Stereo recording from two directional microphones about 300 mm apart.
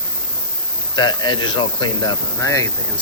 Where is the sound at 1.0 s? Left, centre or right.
Centre.